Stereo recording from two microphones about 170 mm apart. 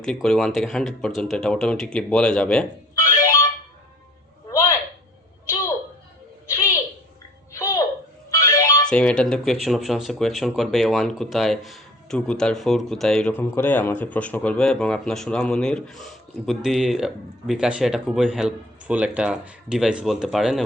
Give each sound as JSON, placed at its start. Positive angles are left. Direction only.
{"t": 0.0, "sound": "speech", "side_deg": 5}
{"t": 2.9, "sound": "music", "side_deg": 15}
{"t": 7.5, "sound": "a sound", "side_deg": 15}
{"t": 8.3, "sound": "music", "side_deg": 15}
{"t": 8.9, "sound": "speech", "side_deg": 5}